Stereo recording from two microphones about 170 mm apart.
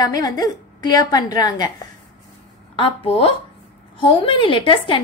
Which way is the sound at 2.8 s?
35° left (ahead or behind).